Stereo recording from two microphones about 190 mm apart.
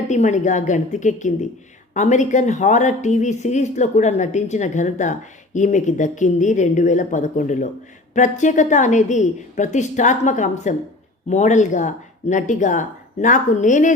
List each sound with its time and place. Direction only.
0.1 s a woman's voice: 40° left (ahead or behind)